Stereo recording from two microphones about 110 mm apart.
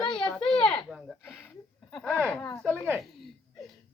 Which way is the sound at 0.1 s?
10° left (ahead or behind).